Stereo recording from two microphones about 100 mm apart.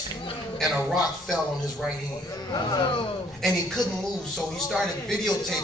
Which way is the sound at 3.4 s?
5° left (ahead or behind).